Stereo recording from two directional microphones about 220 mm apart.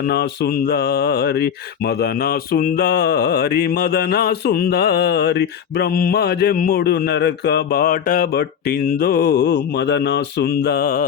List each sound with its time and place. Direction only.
0.1 s mantra: 45° left (ahead or behind)